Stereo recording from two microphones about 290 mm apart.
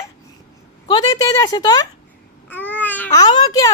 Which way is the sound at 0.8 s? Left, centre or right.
Centre.